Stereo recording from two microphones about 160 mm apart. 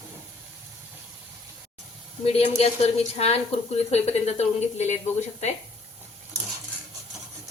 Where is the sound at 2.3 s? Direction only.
40° left (ahead or behind).